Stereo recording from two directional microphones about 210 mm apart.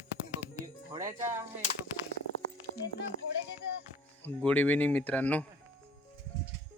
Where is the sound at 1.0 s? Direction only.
15° right (ahead or behind).